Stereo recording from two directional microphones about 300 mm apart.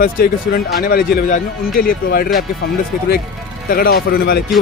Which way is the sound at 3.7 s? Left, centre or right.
Left.